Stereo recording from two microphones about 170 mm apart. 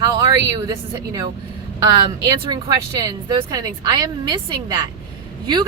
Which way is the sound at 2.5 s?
25° right (ahead or behind).